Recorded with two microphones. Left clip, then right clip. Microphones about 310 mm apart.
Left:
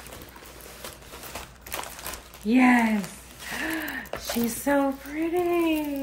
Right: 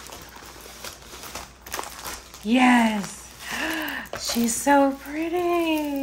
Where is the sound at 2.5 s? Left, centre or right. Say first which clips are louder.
Right 2 dB; right.